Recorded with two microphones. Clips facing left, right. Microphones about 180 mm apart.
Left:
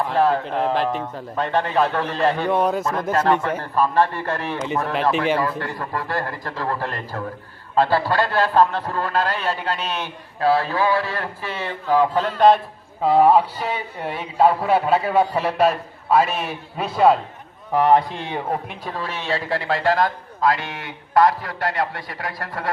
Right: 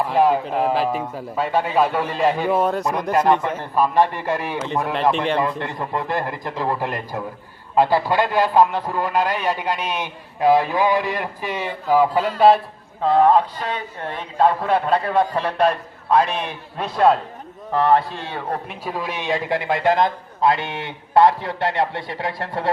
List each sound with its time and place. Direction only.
0.1 s a man's voice: 10° right (ahead or behind)
2.8 s a man's voice: 15° right (ahead or behind)
5.1 s a man's voice: 5° left (ahead or behind)
5.4 s a man's voice: 20° right (ahead or behind); by 12.6 s 5° right (ahead or behind)
13.0 s a man's voice: 10° left (ahead or behind)
17.7 s a man's voice: 15° left (ahead or behind)
18.7 s a man's voice: 10° right (ahead or behind); by 22.7 s 25° right (ahead or behind)